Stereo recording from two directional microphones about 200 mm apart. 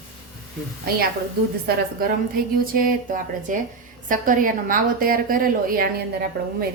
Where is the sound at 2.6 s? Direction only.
45° right (ahead or behind).